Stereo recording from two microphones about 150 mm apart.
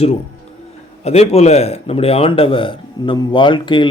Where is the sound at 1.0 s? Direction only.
45° left (ahead or behind).